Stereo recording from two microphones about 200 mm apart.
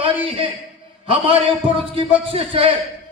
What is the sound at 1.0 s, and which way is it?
A man's voice, 25° right (ahead or behind).